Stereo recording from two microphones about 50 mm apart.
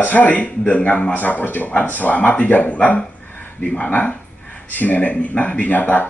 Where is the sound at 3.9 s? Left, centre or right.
Left.